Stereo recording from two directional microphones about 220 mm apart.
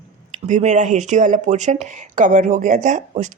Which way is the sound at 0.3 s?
35° right (ahead or behind).